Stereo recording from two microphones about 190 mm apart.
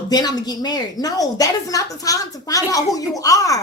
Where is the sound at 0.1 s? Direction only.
20° left (ahead or behind).